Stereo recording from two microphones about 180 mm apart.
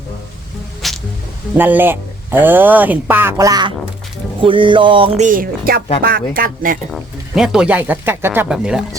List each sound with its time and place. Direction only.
0.8 s speech: centre (ahead or behind)
1.5 s speech: 10° right (ahead or behind)
4.4 s music: 30° right (ahead or behind)
5.2 s speech: 50° right (ahead or behind)
6.9 s speech: 5° right (ahead or behind)